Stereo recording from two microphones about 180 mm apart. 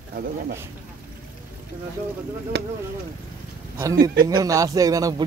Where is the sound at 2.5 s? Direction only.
70° right (ahead or behind).